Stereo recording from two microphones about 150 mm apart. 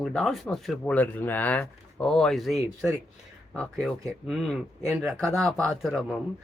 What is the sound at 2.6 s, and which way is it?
Speech, 20° right (ahead or behind).